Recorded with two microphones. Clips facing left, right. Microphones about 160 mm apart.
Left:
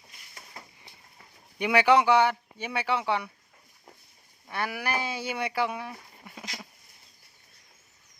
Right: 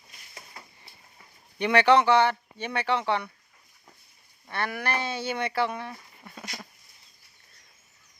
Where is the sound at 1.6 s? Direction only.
10° left (ahead or behind).